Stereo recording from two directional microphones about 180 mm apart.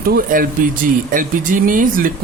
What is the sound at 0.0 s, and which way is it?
Speech, 50° right (ahead or behind).